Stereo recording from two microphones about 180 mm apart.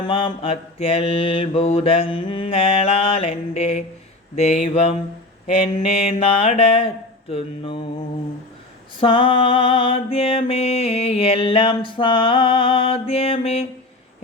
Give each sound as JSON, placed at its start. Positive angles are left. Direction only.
{"t": 0.0, "sound": "mantra", "side_deg": 25}
{"t": 9.0, "sound": "music", "side_deg": 30}